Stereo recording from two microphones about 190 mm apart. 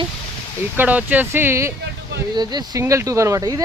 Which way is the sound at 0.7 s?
10° right (ahead or behind).